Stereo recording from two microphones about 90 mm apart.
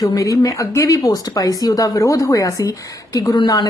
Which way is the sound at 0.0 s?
40° left (ahead or behind).